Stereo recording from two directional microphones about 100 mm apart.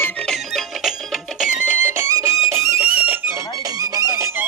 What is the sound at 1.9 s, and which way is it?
Music, 30° right (ahead or behind).